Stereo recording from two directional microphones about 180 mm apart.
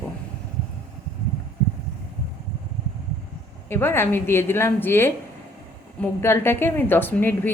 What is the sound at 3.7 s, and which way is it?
A woman's voice, 10° left (ahead or behind).